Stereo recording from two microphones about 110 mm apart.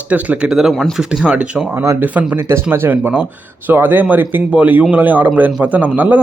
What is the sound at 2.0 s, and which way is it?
Speech, 15° right (ahead or behind).